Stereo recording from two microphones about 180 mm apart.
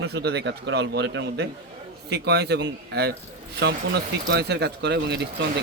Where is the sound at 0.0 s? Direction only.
65° right (ahead or behind).